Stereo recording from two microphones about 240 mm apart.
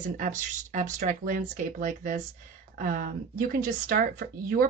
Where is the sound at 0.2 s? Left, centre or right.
Right.